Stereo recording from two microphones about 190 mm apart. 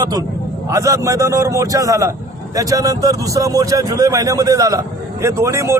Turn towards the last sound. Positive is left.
turn(degrees=-15)  # may be behind; listen again after turning